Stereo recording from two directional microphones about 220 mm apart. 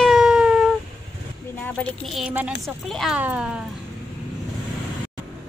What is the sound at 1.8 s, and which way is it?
A woman's voice, centre (ahead or behind).